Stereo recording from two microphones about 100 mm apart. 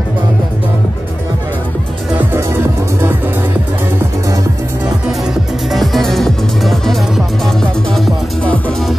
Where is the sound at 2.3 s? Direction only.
25° right (ahead or behind).